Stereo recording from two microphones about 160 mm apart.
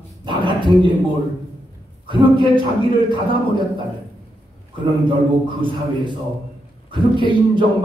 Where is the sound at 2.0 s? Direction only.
30° right (ahead or behind).